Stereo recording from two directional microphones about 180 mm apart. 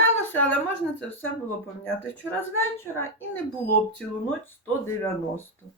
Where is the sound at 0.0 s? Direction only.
10° left (ahead or behind).